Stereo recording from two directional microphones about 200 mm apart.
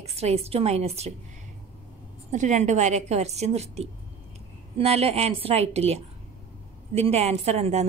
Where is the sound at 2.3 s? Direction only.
35° right (ahead or behind).